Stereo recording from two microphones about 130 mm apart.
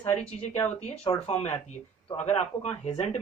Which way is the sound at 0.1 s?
15° left (ahead or behind).